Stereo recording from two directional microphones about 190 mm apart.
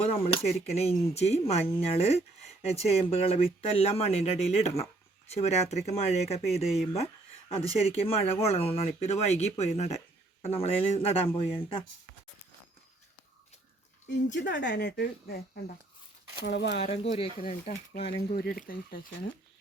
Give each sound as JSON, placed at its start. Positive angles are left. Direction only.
{"t": 0.0, "sound": "speech", "side_deg": 30}
{"t": 14.3, "sound": "speech", "side_deg": 70}
{"t": 16.7, "sound": "speech", "side_deg": 30}
{"t": 17.4, "sound": "speech", "side_deg": 45}